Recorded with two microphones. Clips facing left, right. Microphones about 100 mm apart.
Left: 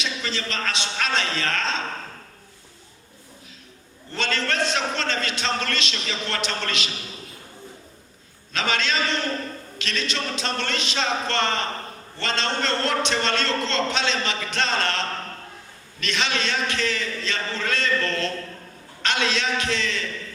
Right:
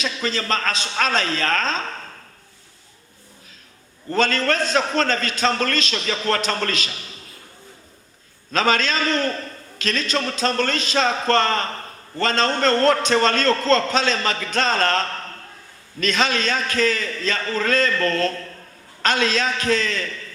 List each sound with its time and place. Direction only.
0.0 s a man's voice: 40° right (ahead or behind)
4.1 s a man's voice: 40° right (ahead or behind)
8.5 s a man's voice: 40° right (ahead or behind)